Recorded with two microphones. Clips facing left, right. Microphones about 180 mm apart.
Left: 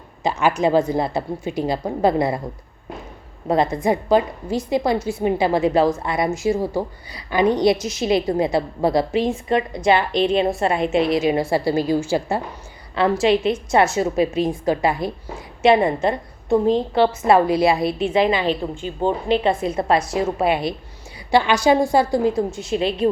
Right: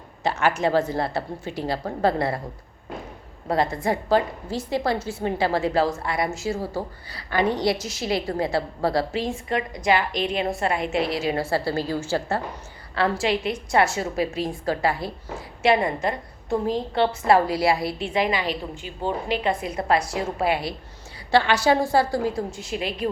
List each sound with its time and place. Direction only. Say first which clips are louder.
0.2 s a woman's voice: left 3 dB; 15° left (ahead or behind)
3.5 s a woman's voice: left 4 dB; 20° left (ahead or behind)